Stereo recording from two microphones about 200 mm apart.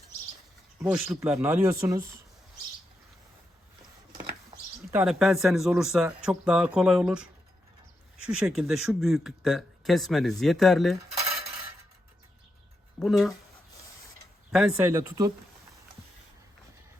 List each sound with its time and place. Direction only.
0.8 s speech: 10° right (ahead or behind)
4.9 s speech: 5° right (ahead or behind)
8.3 s speech: 5° right (ahead or behind)
11.2 s cutlery: 30° right (ahead or behind)
13.0 s speech: centre (ahead or behind)
14.5 s speech: centre (ahead or behind)
14.8 s speech: 15° right (ahead or behind)